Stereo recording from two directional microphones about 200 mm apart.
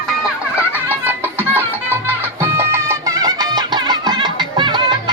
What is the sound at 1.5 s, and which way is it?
Music, 10° right (ahead or behind).